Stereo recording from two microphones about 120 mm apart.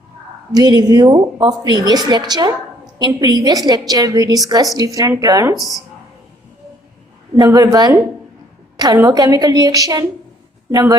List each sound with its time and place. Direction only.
0.5 s a woman's voice: 35° right (ahead or behind)
5.5 s speech: centre (ahead or behind)
7.3 s a woman's voice: 30° right (ahead or behind)
9.0 s a woman's voice: 30° right (ahead or behind)